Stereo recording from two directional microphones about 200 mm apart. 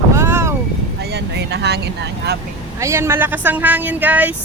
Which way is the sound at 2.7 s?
15° right (ahead or behind).